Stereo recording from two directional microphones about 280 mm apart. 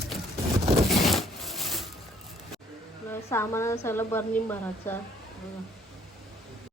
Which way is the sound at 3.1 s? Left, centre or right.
Centre.